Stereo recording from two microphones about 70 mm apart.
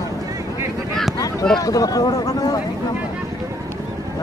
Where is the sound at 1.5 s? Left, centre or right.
Left.